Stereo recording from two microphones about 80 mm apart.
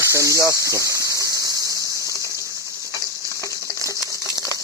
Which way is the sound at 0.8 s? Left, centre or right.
Right.